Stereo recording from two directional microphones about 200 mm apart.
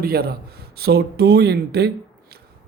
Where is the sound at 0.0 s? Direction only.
50° right (ahead or behind).